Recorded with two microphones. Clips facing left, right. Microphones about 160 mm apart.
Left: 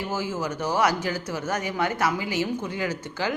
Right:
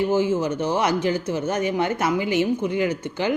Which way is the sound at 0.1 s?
20° right (ahead or behind).